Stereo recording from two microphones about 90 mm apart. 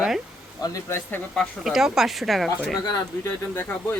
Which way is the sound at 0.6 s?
40° left (ahead or behind).